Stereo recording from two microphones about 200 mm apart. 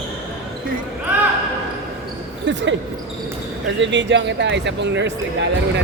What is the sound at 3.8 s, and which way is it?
Speech, 65° right (ahead or behind).